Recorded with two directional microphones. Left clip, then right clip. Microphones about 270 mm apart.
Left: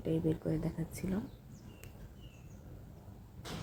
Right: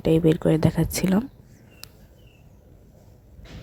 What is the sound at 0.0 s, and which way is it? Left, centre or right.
Speech, right.